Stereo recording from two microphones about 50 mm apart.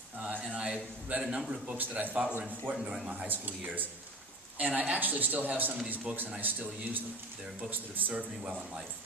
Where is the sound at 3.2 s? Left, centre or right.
Right.